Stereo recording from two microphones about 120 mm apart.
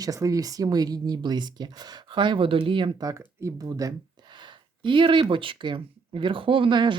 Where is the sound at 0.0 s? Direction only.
30° right (ahead or behind).